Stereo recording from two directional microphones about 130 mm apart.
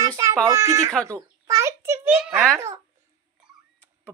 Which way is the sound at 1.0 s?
25° right (ahead or behind).